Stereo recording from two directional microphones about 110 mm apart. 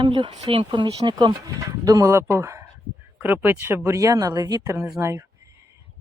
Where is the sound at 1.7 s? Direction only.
30° right (ahead or behind).